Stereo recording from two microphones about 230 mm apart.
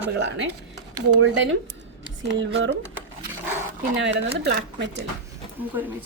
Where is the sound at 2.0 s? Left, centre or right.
Right.